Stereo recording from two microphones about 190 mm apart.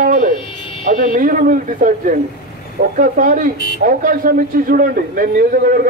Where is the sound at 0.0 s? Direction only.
50° right (ahead or behind).